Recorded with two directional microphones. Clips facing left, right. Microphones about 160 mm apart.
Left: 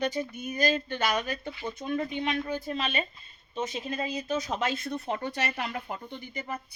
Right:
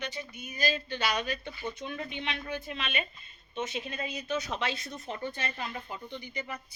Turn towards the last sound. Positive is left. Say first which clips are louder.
# left 2 dB
turn(degrees=50)  # may be behind; listen again after turning